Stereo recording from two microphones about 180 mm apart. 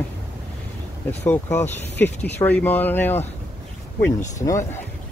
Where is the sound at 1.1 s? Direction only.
10° left (ahead or behind).